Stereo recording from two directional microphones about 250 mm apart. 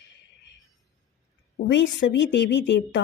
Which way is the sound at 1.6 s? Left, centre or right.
Left.